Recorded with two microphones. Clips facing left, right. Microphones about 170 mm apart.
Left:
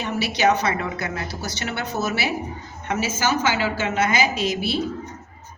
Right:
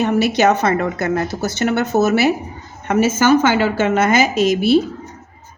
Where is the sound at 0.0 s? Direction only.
50° right (ahead or behind).